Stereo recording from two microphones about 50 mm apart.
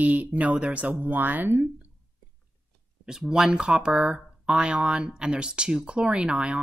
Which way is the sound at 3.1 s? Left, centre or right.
Centre.